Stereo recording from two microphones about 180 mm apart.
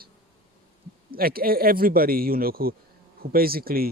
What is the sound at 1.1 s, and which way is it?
Speech, 55° right (ahead or behind).